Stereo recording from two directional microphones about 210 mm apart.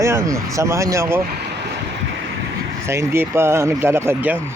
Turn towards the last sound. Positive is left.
turn(degrees=-10)  # may be behind; listen again after turning